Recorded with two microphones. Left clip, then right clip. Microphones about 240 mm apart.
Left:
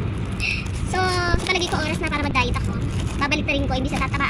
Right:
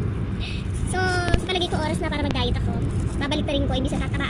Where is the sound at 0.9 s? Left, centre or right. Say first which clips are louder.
Left 2 dB; centre.